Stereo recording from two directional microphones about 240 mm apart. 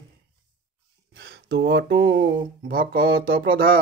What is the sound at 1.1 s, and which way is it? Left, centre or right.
Mantra, right.